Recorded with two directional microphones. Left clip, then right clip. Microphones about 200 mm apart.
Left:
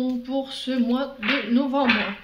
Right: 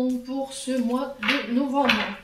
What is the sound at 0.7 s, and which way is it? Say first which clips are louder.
Speech: even; 40° left (ahead or behind).